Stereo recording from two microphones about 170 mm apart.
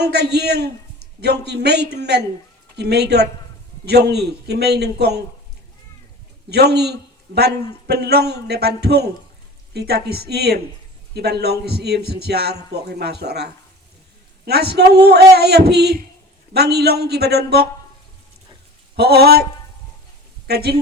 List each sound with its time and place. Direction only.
0.0 s a man's voice: 75° right (ahead or behind)
6.5 s a man's voice: 75° right (ahead or behind)
18.9 s a man's voice: 70° right (ahead or behind)
20.5 s a man's voice: 70° right (ahead or behind)